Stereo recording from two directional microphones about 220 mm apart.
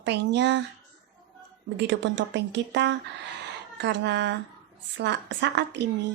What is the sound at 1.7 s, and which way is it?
Speech, 50° right (ahead or behind).